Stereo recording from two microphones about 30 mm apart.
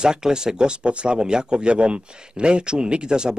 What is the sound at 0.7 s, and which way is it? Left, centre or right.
Speech, right.